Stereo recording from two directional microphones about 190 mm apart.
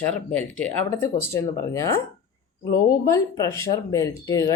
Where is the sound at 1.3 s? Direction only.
15° left (ahead or behind).